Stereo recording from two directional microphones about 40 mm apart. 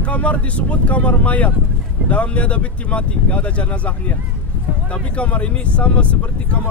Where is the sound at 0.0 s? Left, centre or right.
Left.